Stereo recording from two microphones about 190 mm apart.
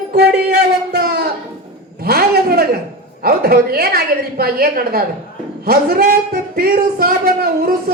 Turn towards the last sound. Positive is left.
turn(degrees=-55)  # may be behind; listen again after turning